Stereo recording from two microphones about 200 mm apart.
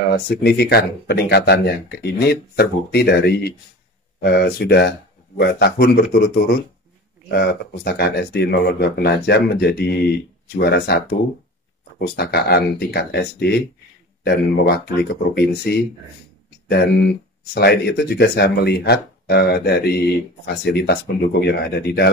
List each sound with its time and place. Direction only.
0.1 s speech: 55° left (ahead or behind)
12.0 s speech: 55° left (ahead or behind)